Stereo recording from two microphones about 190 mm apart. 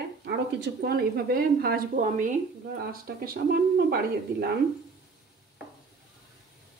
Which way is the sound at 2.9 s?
55° right (ahead or behind).